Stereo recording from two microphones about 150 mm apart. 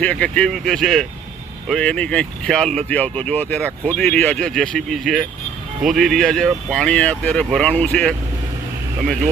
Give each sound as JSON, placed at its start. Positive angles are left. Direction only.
{"t": 0.0, "sound": "speech", "side_deg": 10}